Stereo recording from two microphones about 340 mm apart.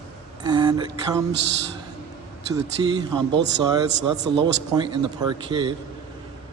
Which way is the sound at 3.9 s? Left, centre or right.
Right.